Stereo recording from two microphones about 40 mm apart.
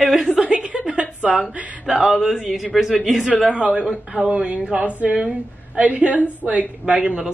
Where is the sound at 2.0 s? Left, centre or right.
Centre.